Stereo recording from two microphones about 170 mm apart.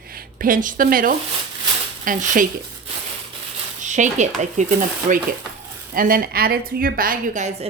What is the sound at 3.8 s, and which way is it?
Speech, 45° right (ahead or behind).